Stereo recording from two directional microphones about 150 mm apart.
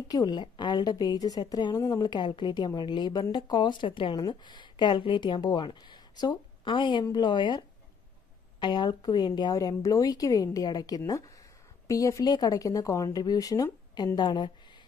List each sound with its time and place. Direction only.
0.1 s a woman's voice: 25° left (ahead or behind)